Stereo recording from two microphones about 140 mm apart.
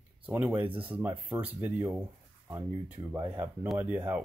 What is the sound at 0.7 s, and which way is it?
Speech, 40° right (ahead or behind).